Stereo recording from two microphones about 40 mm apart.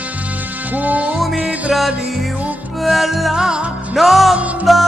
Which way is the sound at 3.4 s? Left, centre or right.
Centre.